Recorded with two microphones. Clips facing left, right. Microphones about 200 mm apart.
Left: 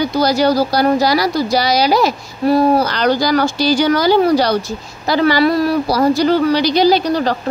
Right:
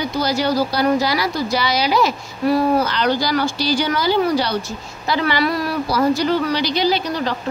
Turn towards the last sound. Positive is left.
turn(degrees=40)  # may be behind; listen again after turning